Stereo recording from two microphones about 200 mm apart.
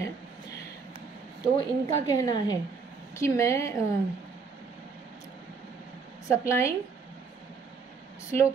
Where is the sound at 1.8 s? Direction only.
20° left (ahead or behind).